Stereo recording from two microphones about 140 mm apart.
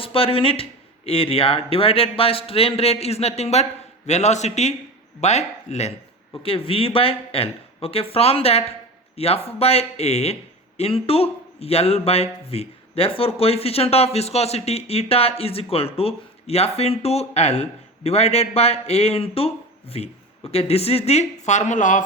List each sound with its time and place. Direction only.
0.0 s a man's voice: 40° left (ahead or behind)
6.4 s a man's voice: 40° left (ahead or behind); by 22.0 s 65° left (ahead or behind)